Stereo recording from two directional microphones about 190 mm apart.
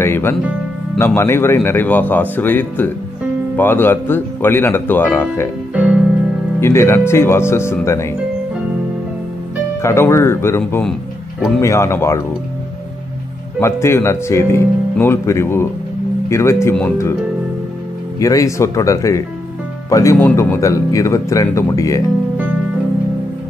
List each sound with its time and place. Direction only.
0.0 s speech: 10° left (ahead or behind)
5.8 s music: 5° right (ahead or behind)
6.6 s speech: 15° left (ahead or behind)
9.8 s speech: 15° left (ahead or behind)
13.6 s speech: 15° left (ahead or behind)
18.2 s speech: 15° left (ahead or behind)